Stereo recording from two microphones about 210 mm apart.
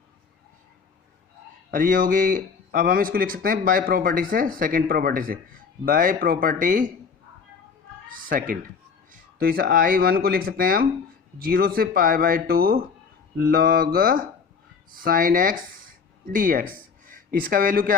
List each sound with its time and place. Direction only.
1.7 s speech: 40° right (ahead or behind)
8.1 s speech: 40° right (ahead or behind)